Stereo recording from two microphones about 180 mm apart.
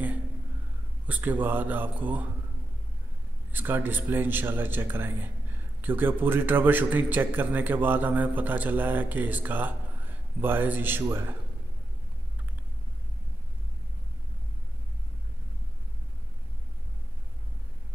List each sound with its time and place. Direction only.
1.0 s a man's voice: 10° right (ahead or behind)
3.5 s a man's voice: 10° right (ahead or behind)